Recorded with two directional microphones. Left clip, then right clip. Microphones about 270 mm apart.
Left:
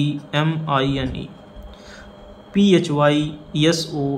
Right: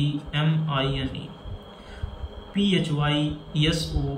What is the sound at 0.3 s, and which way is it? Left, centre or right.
Speech, centre.